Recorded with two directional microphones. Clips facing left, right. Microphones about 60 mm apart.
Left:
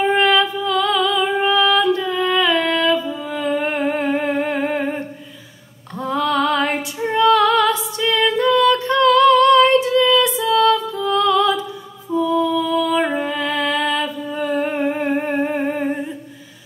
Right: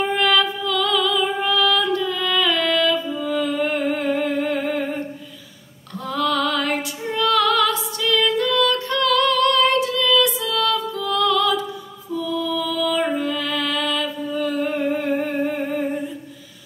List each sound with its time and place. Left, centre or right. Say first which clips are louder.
0.0 s music: left 3 dB; left
3.5 s a sound: left 2 dB; left
6.0 s female singing: left 3 dB; left
12.2 s music: left 6 dB; left
15.2 s humming: left 3 dB; left